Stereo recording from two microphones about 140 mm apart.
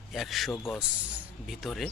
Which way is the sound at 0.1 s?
Centre (ahead or behind).